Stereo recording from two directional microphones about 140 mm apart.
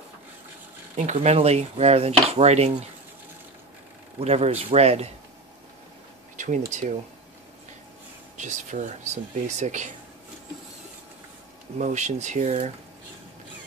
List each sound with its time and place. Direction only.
0.9 s speech: 55° right (ahead or behind)
4.2 s speech: 50° right (ahead or behind)
6.3 s a sound: 60° right (ahead or behind)
6.7 s speech: 55° right (ahead or behind)
8.4 s speech: 60° right (ahead or behind)
11.8 s speech: 60° right (ahead or behind)